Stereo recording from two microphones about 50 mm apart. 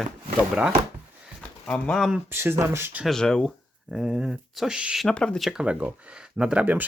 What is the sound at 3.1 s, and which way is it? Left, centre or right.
Speech, centre.